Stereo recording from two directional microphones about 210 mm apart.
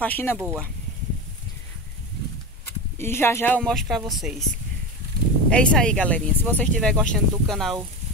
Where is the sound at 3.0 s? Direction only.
10° left (ahead or behind).